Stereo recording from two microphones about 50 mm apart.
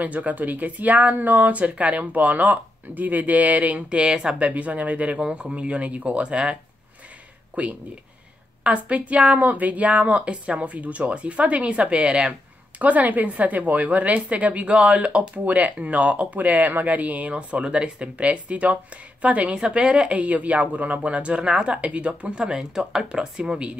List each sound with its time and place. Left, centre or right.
0.0 s speech: right
7.6 s speech: right
20.2 s speech: right